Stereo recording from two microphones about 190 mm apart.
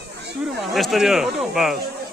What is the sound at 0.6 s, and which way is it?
Speech, centre (ahead or behind).